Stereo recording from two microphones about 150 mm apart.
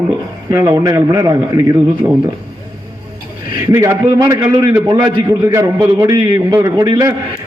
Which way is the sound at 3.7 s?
20° right (ahead or behind).